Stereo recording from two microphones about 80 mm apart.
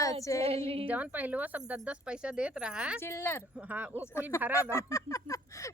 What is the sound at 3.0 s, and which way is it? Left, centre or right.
Speech, left.